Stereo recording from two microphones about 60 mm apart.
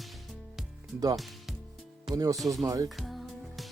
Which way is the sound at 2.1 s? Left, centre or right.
Right.